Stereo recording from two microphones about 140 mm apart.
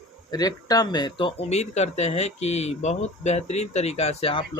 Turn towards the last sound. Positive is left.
turn(degrees=45)  # may be behind; listen again after turning